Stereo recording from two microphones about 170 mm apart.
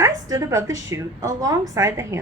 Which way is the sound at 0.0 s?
20° right (ahead or behind).